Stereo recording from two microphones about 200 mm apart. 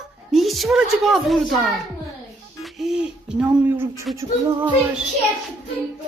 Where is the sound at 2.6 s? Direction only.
Centre (ahead or behind).